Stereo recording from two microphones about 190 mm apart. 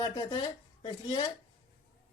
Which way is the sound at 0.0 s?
20° left (ahead or behind).